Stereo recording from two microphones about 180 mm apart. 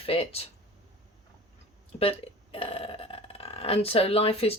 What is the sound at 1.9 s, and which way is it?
Speech, 35° left (ahead or behind).